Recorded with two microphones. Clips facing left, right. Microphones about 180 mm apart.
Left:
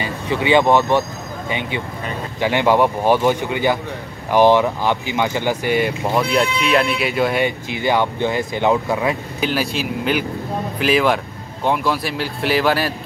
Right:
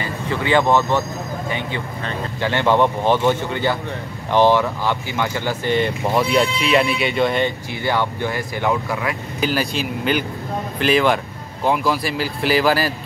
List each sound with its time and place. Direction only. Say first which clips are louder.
0.0 s speech: left 2 dB; 15° left (ahead or behind)
9.4 s speech: right 2 dB; centre (ahead or behind)